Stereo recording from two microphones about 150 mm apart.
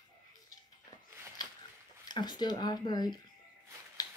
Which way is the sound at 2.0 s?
30° left (ahead or behind).